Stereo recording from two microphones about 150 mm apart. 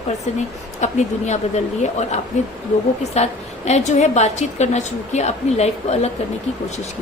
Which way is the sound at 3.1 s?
45° left (ahead or behind).